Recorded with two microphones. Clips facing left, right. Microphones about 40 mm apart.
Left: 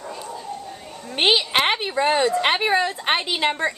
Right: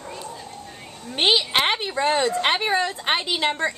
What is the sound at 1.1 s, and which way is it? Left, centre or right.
A woman's voice, centre.